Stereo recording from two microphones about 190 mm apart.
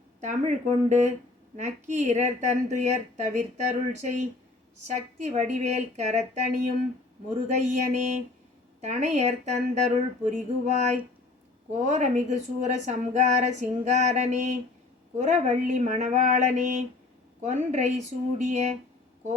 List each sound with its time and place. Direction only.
0.2 s a woman's voice: 40° right (ahead or behind)
4.9 s a woman's voice: 35° right (ahead or behind)